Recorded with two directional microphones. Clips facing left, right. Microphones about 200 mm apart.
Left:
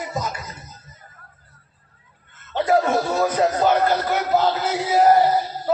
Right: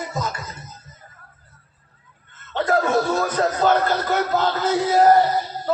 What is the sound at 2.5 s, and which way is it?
Chuckle, 10° left (ahead or behind).